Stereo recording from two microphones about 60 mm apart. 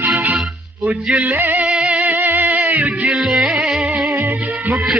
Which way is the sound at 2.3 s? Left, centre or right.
Right.